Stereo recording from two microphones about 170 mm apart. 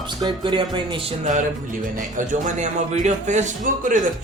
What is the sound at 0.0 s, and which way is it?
Speech, 25° right (ahead or behind).